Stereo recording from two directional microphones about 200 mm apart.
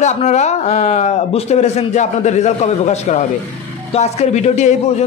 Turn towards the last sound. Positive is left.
turn(degrees=35)  # may be behind; listen again after turning